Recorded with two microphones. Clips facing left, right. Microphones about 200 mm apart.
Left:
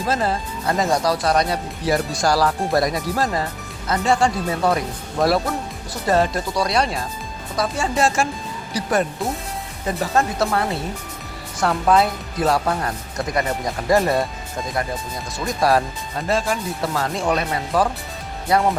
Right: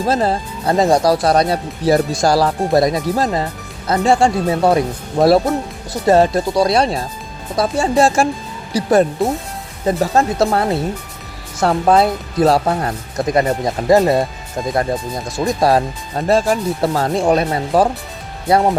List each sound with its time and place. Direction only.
0.0 s speech: 30° right (ahead or behind)
15.4 s speech: 40° right (ahead or behind)